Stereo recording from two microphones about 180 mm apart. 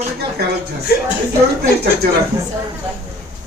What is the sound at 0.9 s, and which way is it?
Speech, 60° left (ahead or behind).